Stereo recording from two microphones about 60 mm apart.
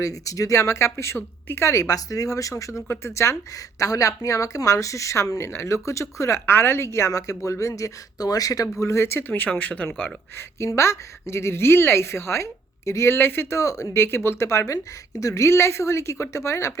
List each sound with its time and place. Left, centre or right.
0.0 s a woman's voice: left
2.8 s a woman's voice: left
3.8 s a woman's voice: left
6.4 s a woman's voice: left
8.8 s speech: left
10.7 s a woman's voice: left
13.1 s speech: left
13.6 s a woman's voice: left
14.0 s speech: left
14.4 s a woman's voice: left